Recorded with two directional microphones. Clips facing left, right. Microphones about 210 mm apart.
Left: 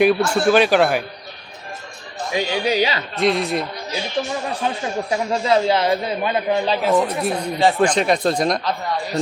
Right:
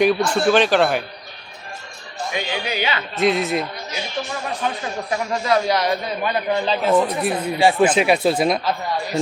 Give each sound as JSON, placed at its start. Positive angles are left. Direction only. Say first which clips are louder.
{"t": 0.0, "sound": "speech", "louder": "left 1 dB", "side_deg": 5}
{"t": 2.3, "sound": "speech", "louder": "left 6 dB", "side_deg": 35}
{"t": 3.2, "sound": "speech", "louder": "even", "side_deg": 0}
{"t": 5.1, "sound": "a man's voice", "louder": "left 1 dB", "side_deg": 25}
{"t": 6.8, "sound": "speech", "louder": "right 3 dB", "side_deg": 0}